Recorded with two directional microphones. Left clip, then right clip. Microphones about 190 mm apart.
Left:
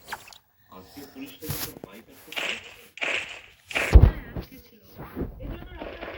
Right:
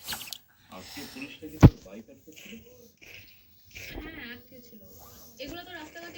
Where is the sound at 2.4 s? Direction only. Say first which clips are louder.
Left 19 dB; 45° left (ahead or behind).